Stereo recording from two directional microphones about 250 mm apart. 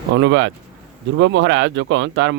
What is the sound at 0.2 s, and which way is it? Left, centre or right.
Speech, right.